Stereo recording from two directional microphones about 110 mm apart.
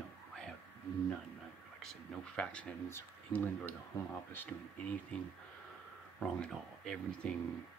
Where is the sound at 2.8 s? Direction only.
20° left (ahead or behind).